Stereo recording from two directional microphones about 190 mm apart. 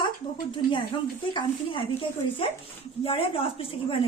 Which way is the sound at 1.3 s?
25° left (ahead or behind).